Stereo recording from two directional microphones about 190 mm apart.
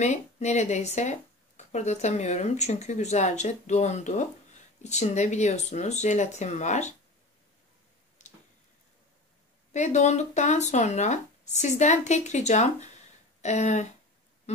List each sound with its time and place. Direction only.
0.0 s speech: 40° left (ahead or behind)
8.2 s a sound: 40° left (ahead or behind)
9.7 s speech: 40° left (ahead or behind)